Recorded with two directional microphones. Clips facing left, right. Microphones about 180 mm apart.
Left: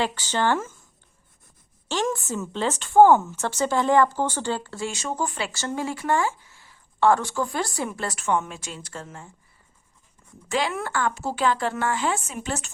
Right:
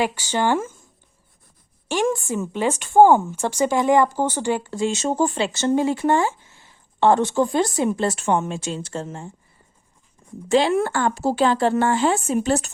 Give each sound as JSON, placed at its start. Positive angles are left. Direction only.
{"t": 0.0, "sound": "speech", "side_deg": -10}
{"t": 1.9, "sound": "a woman's voice", "side_deg": -10}
{"t": 10.5, "sound": "speech", "side_deg": -30}